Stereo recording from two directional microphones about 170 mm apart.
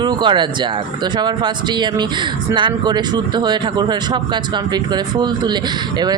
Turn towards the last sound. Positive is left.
turn(degrees=-25)  # may be behind; listen again after turning